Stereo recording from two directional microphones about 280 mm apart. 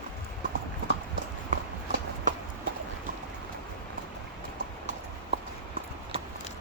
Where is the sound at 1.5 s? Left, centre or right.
Right.